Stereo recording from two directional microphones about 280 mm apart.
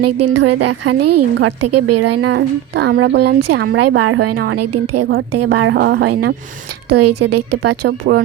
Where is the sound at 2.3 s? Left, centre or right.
Right.